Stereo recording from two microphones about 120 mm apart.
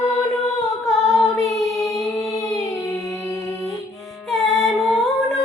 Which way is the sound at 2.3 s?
30° left (ahead or behind).